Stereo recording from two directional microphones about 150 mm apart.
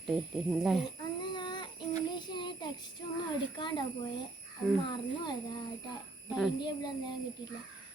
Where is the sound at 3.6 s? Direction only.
30° left (ahead or behind).